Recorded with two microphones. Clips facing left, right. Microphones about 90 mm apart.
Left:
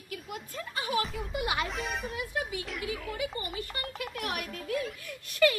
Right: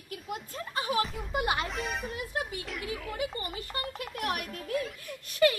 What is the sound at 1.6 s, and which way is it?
Speech, centre (ahead or behind).